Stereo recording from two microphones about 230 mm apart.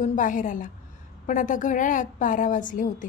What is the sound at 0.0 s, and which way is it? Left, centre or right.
A woman's voice, left.